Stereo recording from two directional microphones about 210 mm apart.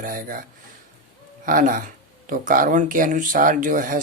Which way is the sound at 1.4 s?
40° right (ahead or behind).